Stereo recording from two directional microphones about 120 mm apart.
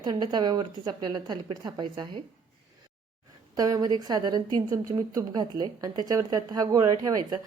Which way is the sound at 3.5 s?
30° right (ahead or behind).